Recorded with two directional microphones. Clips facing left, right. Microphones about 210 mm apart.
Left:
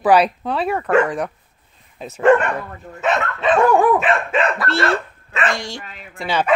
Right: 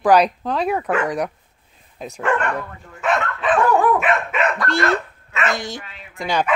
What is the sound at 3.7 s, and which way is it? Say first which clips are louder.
Dog: left 1 dB; 15° left (ahead or behind).